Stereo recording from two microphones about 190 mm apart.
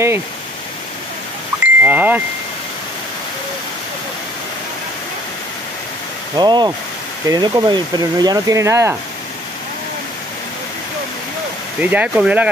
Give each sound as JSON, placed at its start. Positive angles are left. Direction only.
{"t": 1.6, "sound": "a sound", "side_deg": -5}
{"t": 6.3, "sound": "speech", "side_deg": -20}
{"t": 11.8, "sound": "speech", "side_deg": -10}